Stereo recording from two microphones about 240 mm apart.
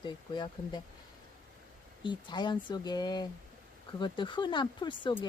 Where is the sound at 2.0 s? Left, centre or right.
Centre.